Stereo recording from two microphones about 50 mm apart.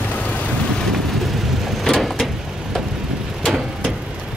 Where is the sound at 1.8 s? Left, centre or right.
Centre.